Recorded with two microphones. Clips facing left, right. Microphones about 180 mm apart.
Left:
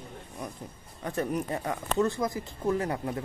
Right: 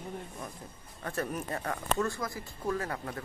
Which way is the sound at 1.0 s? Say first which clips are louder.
Left 5 dB; 15° left (ahead or behind).